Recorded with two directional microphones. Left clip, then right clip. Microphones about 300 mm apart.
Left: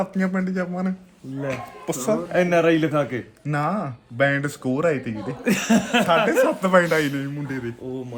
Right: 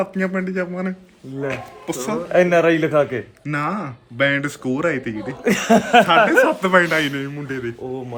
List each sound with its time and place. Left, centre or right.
0.0 s speech: centre
2.3 s a man's voice: centre
3.4 s speech: centre
5.4 s a man's voice: centre
6.4 s speech: centre